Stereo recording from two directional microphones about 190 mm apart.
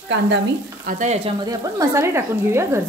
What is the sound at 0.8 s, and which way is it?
Frying, 45° right (ahead or behind).